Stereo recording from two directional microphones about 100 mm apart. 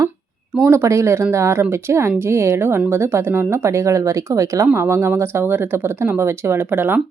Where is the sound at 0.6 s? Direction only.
25° right (ahead or behind).